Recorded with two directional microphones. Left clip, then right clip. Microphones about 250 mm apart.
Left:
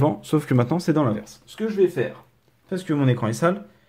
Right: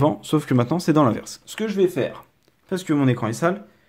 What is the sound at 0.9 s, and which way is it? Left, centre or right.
Speech, right.